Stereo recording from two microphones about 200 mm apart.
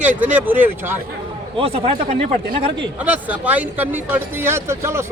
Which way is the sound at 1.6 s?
30° right (ahead or behind).